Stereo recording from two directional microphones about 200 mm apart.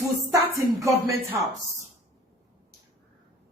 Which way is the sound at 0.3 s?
15° right (ahead or behind).